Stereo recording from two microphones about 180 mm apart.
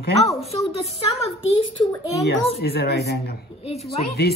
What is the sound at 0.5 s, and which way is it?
Speech, 35° left (ahead or behind).